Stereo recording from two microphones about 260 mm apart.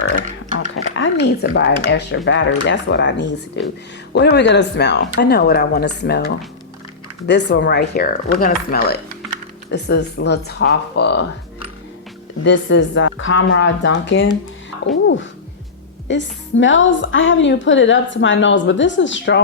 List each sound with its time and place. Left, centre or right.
0.8 s a woman's voice: left
12.4 s a woman's voice: left
16.0 s a woman's voice: left